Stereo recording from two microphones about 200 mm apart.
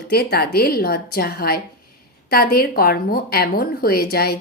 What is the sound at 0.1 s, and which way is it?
Speech, 55° left (ahead or behind).